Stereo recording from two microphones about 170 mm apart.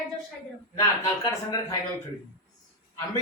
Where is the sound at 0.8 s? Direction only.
20° left (ahead or behind).